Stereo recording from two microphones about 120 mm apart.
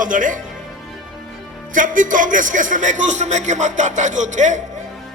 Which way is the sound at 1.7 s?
90° right.